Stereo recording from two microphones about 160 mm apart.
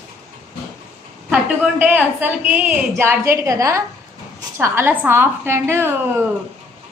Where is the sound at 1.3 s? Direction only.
10° right (ahead or behind).